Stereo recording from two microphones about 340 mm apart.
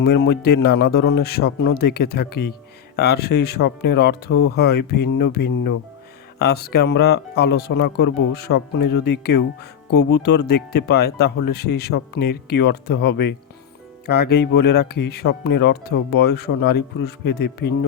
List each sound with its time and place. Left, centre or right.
0.0 s speech: left